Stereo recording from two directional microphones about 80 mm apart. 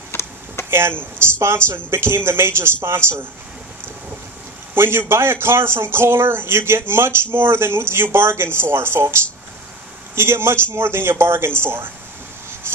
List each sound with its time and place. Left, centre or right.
0.1 s a sound: left
0.7 s a man's voice: right
4.7 s a man's voice: right
12.7 s insect: right